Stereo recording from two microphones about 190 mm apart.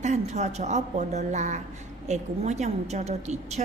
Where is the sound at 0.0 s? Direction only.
35° right (ahead or behind).